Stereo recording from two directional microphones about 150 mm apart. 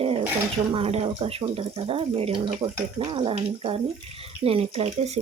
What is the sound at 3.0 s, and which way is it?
Speech, 30° right (ahead or behind).